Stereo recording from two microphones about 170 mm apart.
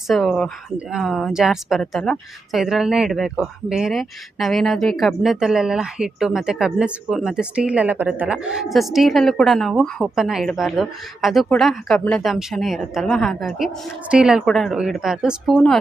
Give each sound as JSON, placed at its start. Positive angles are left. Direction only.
{"t": 0.1, "sound": "speech", "side_deg": 0}